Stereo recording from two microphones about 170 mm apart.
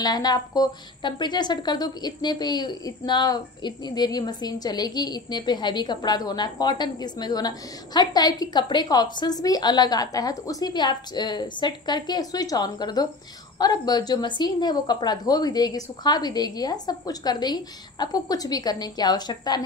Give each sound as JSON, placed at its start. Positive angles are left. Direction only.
{"t": 0.0, "sound": "speech", "side_deg": 25}